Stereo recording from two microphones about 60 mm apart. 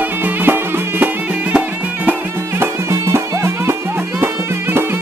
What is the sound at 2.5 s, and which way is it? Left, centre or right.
Music, right.